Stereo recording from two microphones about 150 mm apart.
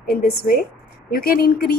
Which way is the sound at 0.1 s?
90° left.